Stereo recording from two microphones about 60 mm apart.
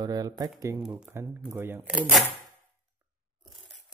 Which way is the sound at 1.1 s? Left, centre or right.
Right.